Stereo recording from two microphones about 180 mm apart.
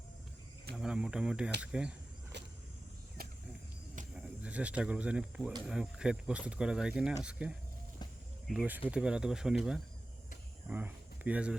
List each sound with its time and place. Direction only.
0.8 s speech: 5° right (ahead or behind)
2.3 s a sound: 70° right (ahead or behind)
3.2 s cricket: 55° right (ahead or behind)
4.1 s speech: 5° right (ahead or behind)